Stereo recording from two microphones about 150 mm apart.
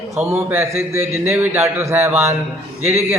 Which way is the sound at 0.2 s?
20° right (ahead or behind).